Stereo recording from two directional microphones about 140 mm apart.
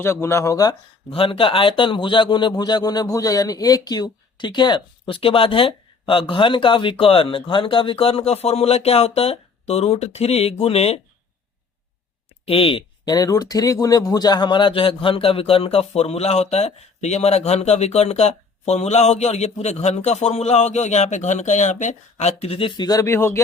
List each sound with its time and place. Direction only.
0.0 s speech: 15° left (ahead or behind)
1.1 s a man's voice: 40° left (ahead or behind)
12.5 s speech: 40° left (ahead or behind)
13.1 s speech: 25° left (ahead or behind)
22.9 s speech: 20° left (ahead or behind)